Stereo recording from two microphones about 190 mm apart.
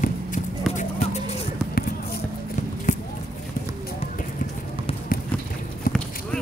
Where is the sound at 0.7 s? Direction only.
35° left (ahead or behind).